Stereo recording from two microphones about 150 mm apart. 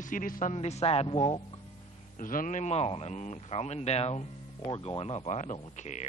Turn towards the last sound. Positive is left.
turn(degrees=50)  # may be behind; listen again after turning